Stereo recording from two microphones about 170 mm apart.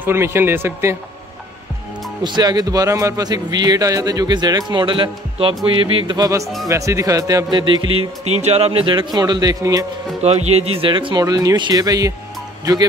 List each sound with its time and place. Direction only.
0.0 s speech: 15° right (ahead or behind)
2.2 s a man's voice: 25° right (ahead or behind)
10.2 s a man's voice: 40° right (ahead or behind); by 12.1 s 20° right (ahead or behind)